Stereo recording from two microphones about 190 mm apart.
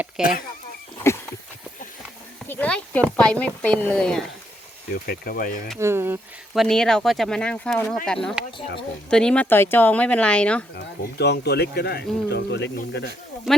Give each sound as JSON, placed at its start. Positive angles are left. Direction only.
{"t": 0.2, "sound": "speech", "side_deg": 50}
{"t": 2.5, "sound": "speech", "side_deg": 5}
{"t": 5.0, "sound": "speech", "side_deg": 50}
{"t": 5.8, "sound": "speech", "side_deg": -10}
{"t": 6.5, "sound": "speech", "side_deg": 0}
{"t": 10.8, "sound": "speech", "side_deg": 60}
{"t": 13.5, "sound": "speech", "side_deg": 0}